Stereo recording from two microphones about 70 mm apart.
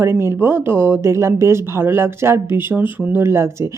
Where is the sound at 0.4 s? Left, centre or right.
Right.